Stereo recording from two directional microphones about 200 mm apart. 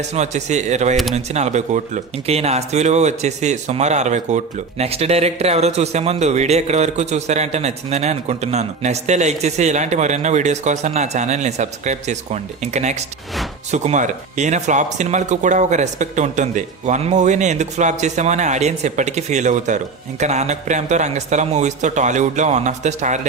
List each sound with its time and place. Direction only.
0.1 s speech: 35° right (ahead or behind)